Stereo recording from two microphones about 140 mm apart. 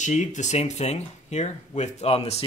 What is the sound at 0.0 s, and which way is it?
Speech, 60° left (ahead or behind).